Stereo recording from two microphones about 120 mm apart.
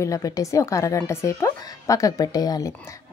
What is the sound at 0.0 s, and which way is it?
A woman's voice, 25° left (ahead or behind).